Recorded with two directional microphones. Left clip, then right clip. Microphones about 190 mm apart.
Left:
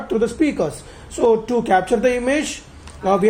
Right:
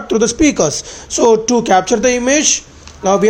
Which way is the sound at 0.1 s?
40° right (ahead or behind).